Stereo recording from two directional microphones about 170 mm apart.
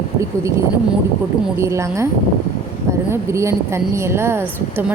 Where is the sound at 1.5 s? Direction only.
15° right (ahead or behind).